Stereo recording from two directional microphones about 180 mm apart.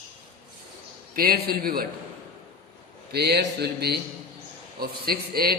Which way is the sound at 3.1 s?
65° right (ahead or behind).